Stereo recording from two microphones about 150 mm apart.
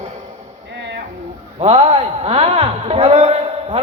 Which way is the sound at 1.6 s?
40° right (ahead or behind).